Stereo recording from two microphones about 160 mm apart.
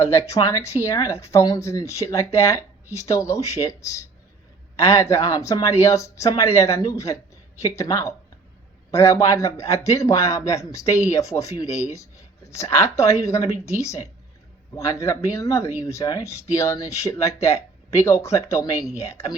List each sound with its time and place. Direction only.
0.0 s a man's voice: 15° left (ahead or behind)